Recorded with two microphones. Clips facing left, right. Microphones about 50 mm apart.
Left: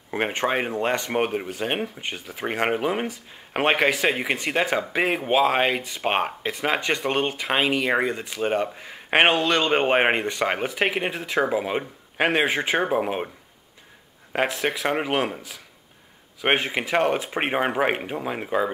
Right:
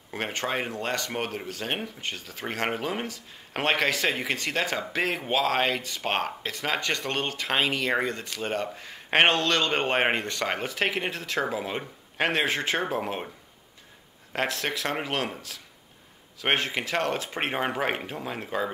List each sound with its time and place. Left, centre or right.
0.1 s speech: left
14.3 s speech: centre